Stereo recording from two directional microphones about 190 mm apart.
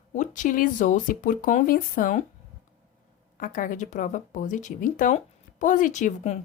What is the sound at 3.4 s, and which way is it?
Speech, 45° left (ahead or behind).